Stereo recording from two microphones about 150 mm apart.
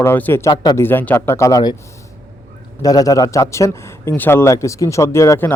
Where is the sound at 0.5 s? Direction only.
30° left (ahead or behind).